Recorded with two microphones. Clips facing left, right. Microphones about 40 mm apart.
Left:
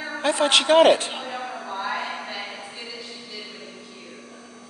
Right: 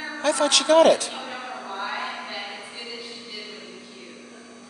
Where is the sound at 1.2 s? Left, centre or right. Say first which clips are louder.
Left 2 dB; centre.